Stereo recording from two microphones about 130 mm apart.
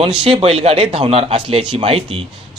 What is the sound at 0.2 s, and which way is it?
A man's voice, 50° right (ahead or behind).